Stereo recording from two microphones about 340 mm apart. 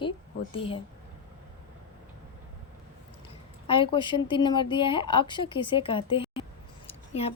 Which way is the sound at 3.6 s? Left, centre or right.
Centre.